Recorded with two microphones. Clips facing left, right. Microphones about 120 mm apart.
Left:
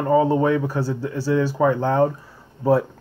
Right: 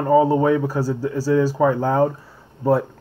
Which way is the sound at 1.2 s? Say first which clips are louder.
Right 2 dB; 40° right (ahead or behind).